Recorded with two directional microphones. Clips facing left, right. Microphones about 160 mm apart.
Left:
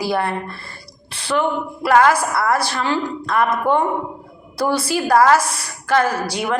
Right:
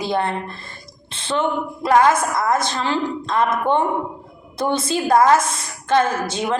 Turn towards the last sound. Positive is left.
turn(degrees=-25)  # may be behind; listen again after turning